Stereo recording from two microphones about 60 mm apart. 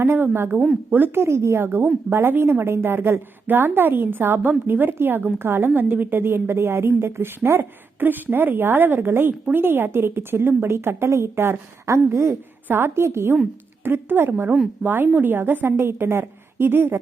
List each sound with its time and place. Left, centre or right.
0.0 s a woman's voice: right
1.2 s a woman's voice: right